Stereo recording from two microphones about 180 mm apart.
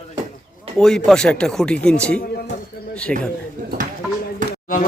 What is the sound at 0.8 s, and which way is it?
Speech, 5° left (ahead or behind).